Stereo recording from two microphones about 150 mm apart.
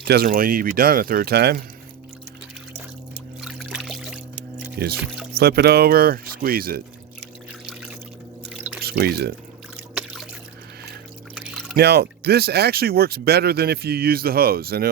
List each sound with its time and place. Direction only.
0.0 s speech: 90° right
3.4 s a sound: 5° right (ahead or behind)
4.8 s speech: 90° right
7.7 s a sound: 5° right (ahead or behind)
8.4 s pour: 5° right (ahead or behind)
8.8 s speech: 90° right
11.3 s pour: centre (ahead or behind)
11.8 s speech: 90° right